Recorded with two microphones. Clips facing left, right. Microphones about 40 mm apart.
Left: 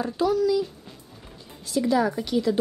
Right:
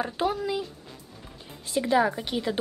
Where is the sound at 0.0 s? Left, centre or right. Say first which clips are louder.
Left 5 dB; right.